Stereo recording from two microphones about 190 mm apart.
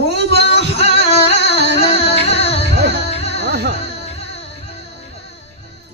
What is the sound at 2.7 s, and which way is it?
Music, 65° right (ahead or behind).